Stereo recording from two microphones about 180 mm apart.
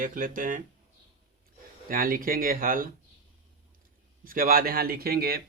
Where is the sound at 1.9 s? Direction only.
50° right (ahead or behind).